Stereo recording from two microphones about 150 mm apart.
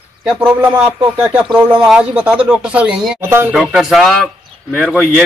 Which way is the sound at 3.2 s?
15° right (ahead or behind).